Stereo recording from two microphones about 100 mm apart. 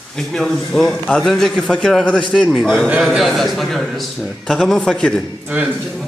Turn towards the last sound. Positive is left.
turn(degrees=-15)  # may be behind; listen again after turning